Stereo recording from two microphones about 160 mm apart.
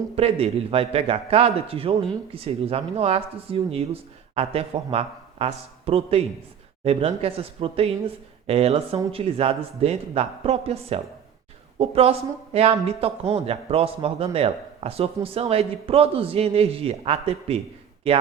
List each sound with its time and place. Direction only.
0.2 s a man's voice: 40° right (ahead or behind)